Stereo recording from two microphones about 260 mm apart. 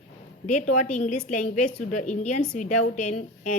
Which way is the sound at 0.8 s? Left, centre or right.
Left.